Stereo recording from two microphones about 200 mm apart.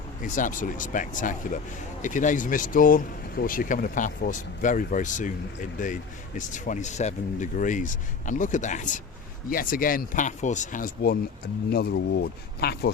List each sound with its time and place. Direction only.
0.2 s speech: 40° left (ahead or behind)